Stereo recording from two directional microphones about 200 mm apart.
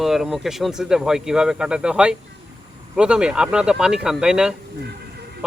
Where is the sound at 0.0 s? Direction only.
Centre (ahead or behind).